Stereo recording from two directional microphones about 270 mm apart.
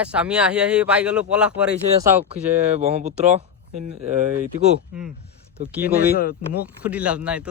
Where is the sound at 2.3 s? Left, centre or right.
Right.